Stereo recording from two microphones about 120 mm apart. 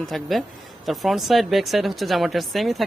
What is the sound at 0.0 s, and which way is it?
Speech, centre (ahead or behind).